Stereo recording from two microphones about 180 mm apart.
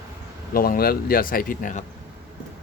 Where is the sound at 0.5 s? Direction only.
55° left (ahead or behind).